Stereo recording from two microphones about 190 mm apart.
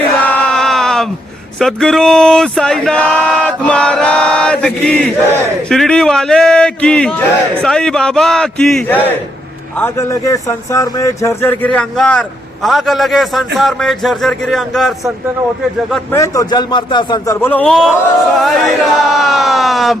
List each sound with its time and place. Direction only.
0.2 s a sound: 5° left (ahead or behind)
1.5 s speech: centre (ahead or behind)
16.1 s speech: 15° left (ahead or behind)
17.4 s speech: 10° left (ahead or behind)